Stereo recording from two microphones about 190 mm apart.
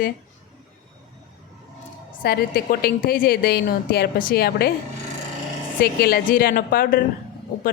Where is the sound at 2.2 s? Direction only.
50° left (ahead or behind).